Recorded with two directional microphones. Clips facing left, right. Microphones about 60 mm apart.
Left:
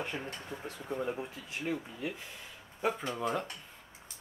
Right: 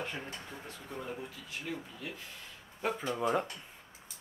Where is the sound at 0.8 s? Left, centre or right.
Left.